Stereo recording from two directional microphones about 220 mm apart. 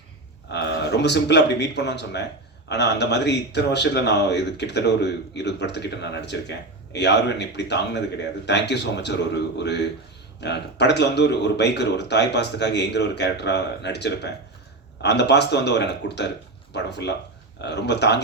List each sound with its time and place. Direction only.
0.4 s speech: 50° left (ahead or behind)